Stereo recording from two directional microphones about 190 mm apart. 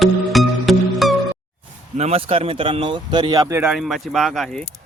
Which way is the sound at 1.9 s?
35° right (ahead or behind).